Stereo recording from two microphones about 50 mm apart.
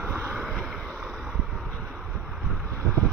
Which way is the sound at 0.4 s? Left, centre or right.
Centre.